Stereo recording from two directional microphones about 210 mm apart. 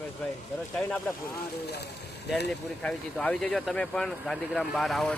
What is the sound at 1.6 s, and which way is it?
Speech, 50° left (ahead or behind).